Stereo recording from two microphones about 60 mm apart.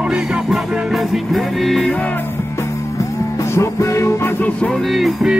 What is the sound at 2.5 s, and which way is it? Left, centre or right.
Music, left.